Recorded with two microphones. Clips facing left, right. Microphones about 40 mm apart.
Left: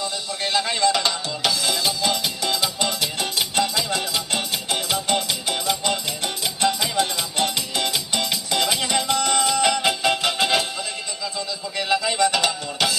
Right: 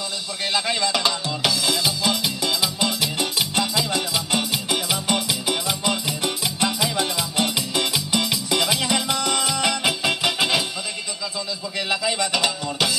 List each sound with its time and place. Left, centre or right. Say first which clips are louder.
0.4 s music: left 2 dB; centre
11.9 s music: left 3 dB; centre